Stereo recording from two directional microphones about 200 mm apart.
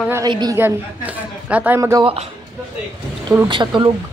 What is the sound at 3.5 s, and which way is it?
Speech, 25° right (ahead or behind).